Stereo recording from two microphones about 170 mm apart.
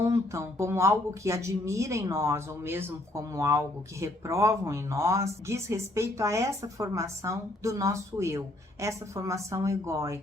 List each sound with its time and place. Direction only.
0.0 s speech: 15° right (ahead or behind)